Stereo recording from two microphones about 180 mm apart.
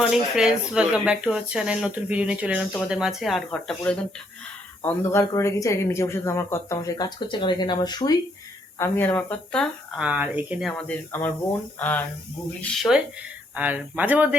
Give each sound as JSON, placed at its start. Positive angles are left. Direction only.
{"t": 0.0, "sound": "speech", "side_deg": -5}
{"t": 8.8, "sound": "speech", "side_deg": 10}
{"t": 10.0, "sound": "speech", "side_deg": -10}
{"t": 13.6, "sound": "speech", "side_deg": -10}